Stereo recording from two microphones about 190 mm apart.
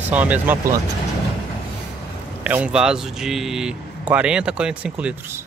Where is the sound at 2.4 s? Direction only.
5° right (ahead or behind).